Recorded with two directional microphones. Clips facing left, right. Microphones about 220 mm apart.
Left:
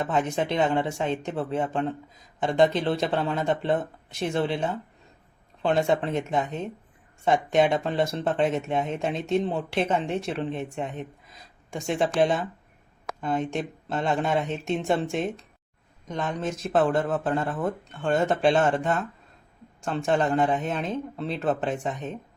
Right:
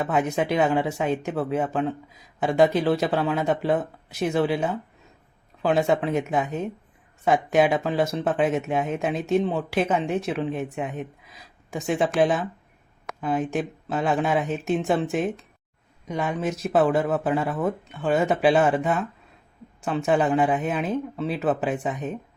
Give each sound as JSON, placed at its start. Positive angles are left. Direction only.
{"t": 0.0, "sound": "speech", "side_deg": -10}